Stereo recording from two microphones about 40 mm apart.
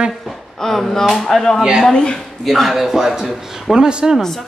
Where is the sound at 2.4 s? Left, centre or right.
Centre.